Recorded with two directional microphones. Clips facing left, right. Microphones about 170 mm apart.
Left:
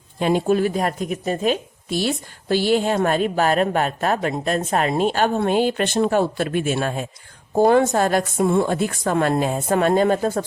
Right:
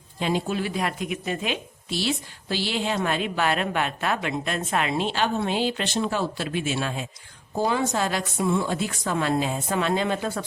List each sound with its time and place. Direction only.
0.2 s a woman's voice: 50° left (ahead or behind)